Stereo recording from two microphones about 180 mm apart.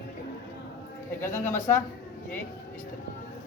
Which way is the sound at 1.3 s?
15° left (ahead or behind).